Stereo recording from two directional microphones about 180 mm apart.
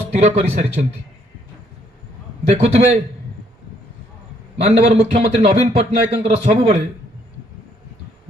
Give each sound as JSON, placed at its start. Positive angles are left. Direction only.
{"t": 0.1, "sound": "speech", "side_deg": -35}
{"t": 2.5, "sound": "speech", "side_deg": -35}
{"t": 4.6, "sound": "speech", "side_deg": -40}